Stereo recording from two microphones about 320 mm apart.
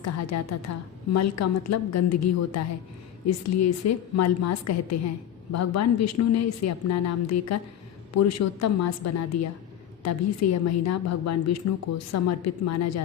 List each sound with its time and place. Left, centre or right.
0.0 s a woman's voice: left